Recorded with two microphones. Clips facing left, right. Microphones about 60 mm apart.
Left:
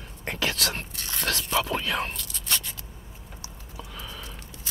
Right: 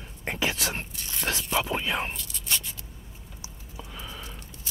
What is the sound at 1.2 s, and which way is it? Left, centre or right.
Whispering, centre.